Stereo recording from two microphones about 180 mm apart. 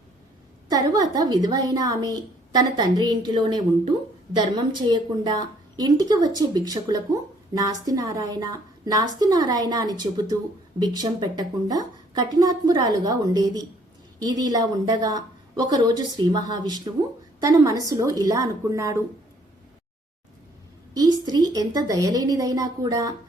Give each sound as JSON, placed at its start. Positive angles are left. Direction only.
{"t": 0.7, "sound": "a woman's voice", "side_deg": -20}
{"t": 20.9, "sound": "a woman's voice", "side_deg": -20}